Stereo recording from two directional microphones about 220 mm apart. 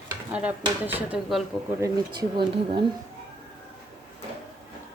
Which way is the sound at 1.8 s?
20° right (ahead or behind).